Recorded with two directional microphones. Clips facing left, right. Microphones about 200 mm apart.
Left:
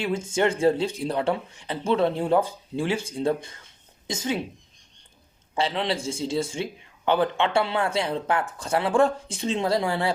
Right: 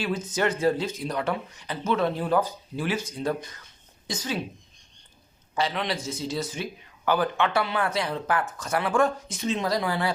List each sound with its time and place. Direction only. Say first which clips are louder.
0.0 s speech: left 3 dB; 25° left (ahead or behind)
5.5 s speech: left 2 dB; 25° left (ahead or behind)